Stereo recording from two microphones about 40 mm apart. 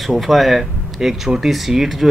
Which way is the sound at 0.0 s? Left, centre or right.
Centre.